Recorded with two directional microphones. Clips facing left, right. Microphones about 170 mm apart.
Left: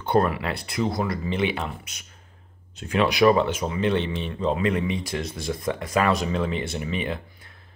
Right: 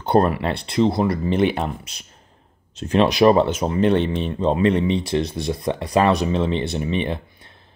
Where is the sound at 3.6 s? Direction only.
45° right (ahead or behind).